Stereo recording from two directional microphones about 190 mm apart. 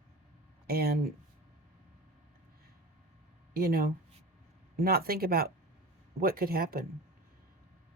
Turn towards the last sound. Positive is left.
turn(degrees=-50)  # may be behind; listen again after turning